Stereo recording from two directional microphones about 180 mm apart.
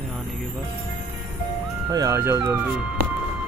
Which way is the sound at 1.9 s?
20° right (ahead or behind).